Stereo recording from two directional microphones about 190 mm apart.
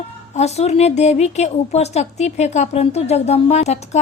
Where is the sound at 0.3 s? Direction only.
35° left (ahead or behind).